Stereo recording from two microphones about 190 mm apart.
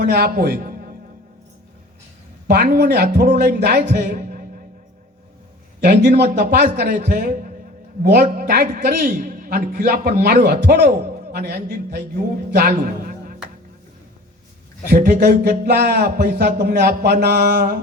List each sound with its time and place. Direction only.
0.0 s a man's voice: 55° right (ahead or behind)
2.5 s a man's voice: 60° right (ahead or behind)
5.8 s a man's voice: 60° right (ahead or behind)
14.8 s a man's voice: 55° right (ahead or behind)